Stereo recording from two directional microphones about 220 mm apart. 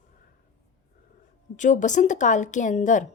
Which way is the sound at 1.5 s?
35° left (ahead or behind).